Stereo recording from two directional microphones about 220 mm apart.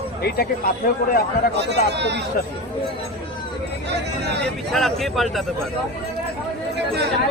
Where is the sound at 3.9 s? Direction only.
50° right (ahead or behind).